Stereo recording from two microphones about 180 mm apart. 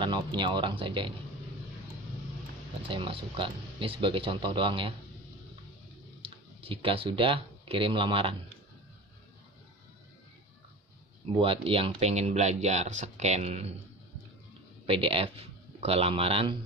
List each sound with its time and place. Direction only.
0.0 s speech: 25° right (ahead or behind)
2.9 s speech: 30° right (ahead or behind)
6.2 s speech: 30° right (ahead or behind)
11.3 s speech: 30° right (ahead or behind)
14.9 s speech: 30° right (ahead or behind)